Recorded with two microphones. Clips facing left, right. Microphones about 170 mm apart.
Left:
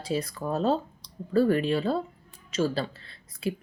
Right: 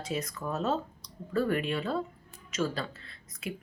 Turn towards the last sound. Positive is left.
turn(degrees=30)  # may be behind; listen again after turning